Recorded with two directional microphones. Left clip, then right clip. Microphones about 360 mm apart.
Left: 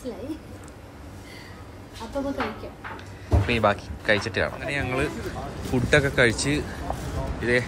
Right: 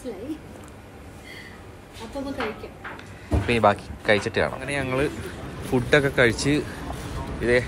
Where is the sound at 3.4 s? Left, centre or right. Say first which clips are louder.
Right 3 dB; centre.